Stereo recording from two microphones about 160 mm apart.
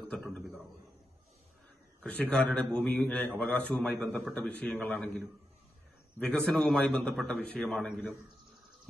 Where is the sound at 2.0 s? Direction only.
10° left (ahead or behind).